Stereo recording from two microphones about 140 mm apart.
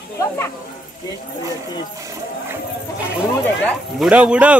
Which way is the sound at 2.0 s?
25° right (ahead or behind).